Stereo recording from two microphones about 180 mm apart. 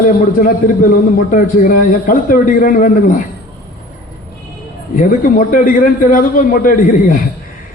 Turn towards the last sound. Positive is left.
turn(degrees=50)  # may be behind; listen again after turning